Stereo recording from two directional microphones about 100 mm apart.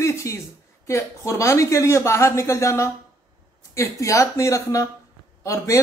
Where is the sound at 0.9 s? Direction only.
30° left (ahead or behind).